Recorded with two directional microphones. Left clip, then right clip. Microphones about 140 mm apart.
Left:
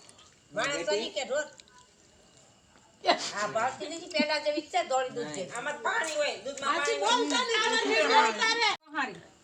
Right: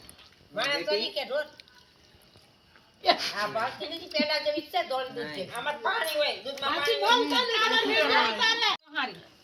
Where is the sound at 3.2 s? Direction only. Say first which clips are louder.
Right 2 dB; 25° left (ahead or behind).